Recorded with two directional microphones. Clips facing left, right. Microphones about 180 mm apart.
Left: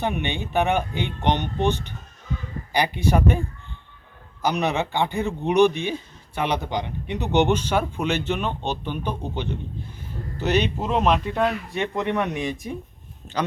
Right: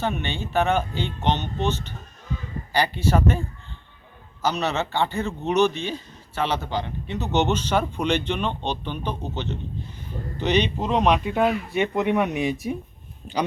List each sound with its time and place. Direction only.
0.0 s speech: 15° left (ahead or behind)
4.4 s speech: 15° left (ahead or behind); by 13.4 s 10° right (ahead or behind)